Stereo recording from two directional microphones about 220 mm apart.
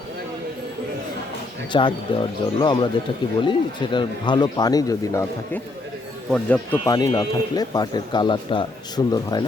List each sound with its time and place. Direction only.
1.7 s speech: 20° left (ahead or behind)
6.3 s speech: 5° left (ahead or behind)